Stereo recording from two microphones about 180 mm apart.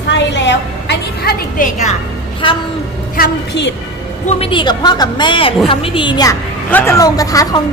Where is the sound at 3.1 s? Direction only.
65° left (ahead or behind).